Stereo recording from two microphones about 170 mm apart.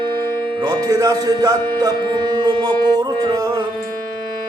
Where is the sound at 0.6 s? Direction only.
20° right (ahead or behind).